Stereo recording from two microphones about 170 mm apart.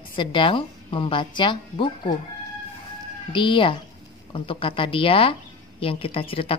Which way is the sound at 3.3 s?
30° left (ahead or behind).